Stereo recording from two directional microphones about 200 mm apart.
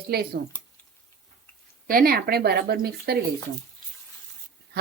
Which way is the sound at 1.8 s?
45° right (ahead or behind).